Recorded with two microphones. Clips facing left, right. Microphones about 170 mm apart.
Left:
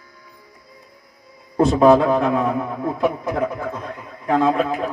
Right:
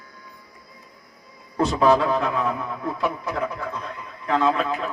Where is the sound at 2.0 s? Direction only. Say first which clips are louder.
Left 5 dB; 50° left (ahead or behind).